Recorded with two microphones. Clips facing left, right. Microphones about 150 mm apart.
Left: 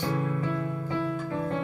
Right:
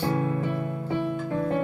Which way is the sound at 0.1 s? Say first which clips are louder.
Right 3 dB; 35° right (ahead or behind).